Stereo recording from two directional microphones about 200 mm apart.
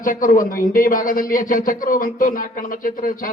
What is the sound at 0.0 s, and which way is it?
A man's voice, 45° left (ahead or behind).